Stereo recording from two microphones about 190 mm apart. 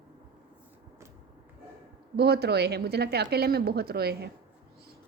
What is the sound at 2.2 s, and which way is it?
A woman's voice, 60° right (ahead or behind).